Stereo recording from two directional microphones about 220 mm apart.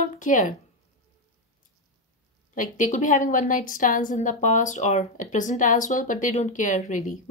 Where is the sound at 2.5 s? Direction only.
35° left (ahead or behind).